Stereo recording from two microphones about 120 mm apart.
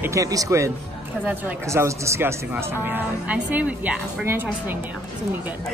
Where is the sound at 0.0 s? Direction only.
25° right (ahead or behind).